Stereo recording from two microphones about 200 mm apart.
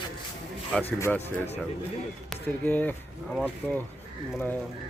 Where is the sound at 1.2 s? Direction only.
30° left (ahead or behind).